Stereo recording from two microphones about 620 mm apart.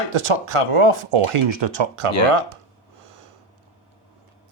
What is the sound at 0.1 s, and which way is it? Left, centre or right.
Speech, right.